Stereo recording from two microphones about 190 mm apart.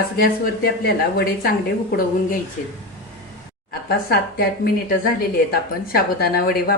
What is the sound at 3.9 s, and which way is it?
A woman's voice, 55° left (ahead or behind).